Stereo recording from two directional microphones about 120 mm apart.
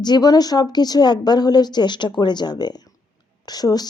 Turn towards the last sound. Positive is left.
turn(degrees=35)  # may be behind; listen again after turning